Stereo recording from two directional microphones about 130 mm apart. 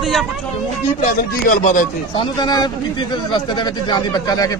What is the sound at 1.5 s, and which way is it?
Speech, 75° left (ahead or behind).